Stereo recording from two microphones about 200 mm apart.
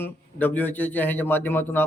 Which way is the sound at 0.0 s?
10° left (ahead or behind).